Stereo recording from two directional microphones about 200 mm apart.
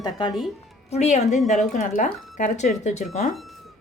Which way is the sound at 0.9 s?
35° left (ahead or behind).